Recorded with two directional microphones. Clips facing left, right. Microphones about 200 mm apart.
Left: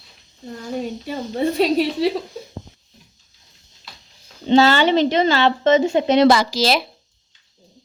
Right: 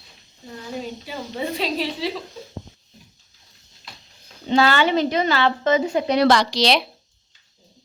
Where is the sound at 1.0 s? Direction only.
45° left (ahead or behind).